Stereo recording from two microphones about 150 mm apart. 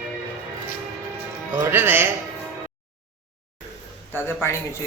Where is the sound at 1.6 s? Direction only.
15° right (ahead or behind).